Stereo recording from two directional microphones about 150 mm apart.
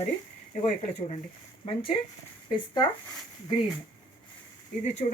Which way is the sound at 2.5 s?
25° left (ahead or behind).